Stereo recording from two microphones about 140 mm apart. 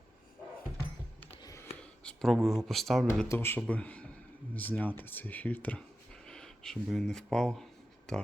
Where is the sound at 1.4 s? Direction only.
25° left (ahead or behind).